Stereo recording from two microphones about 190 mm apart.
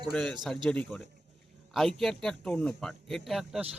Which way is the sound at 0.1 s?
5° left (ahead or behind).